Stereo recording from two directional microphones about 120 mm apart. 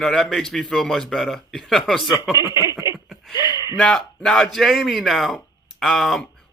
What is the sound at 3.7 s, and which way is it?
Speech, 5° left (ahead or behind).